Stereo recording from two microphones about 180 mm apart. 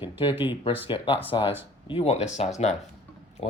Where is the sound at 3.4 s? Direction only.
35° left (ahead or behind).